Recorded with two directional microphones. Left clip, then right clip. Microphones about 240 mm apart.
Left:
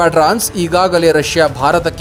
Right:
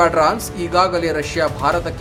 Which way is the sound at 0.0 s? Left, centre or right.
Left.